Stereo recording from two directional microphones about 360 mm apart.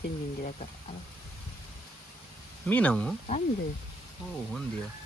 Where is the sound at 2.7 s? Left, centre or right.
Centre.